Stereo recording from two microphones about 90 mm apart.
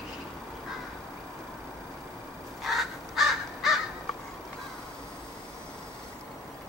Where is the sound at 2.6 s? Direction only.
Centre (ahead or behind).